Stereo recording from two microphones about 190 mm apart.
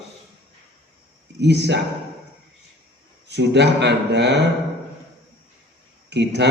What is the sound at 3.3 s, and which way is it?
A man's voice, 65° right (ahead or behind).